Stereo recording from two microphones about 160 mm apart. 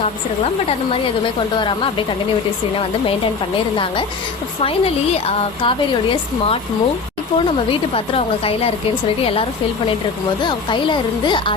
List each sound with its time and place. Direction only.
1.5 s a woman's voice: 30° left (ahead or behind)
5.6 s a woman's voice: 35° left (ahead or behind)